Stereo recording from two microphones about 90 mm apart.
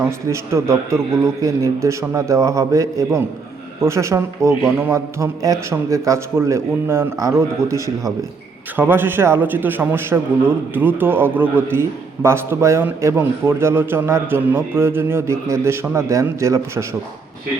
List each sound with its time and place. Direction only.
0.3 s a man's voice: 30° right (ahead or behind)
8.7 s a man's voice: 25° right (ahead or behind)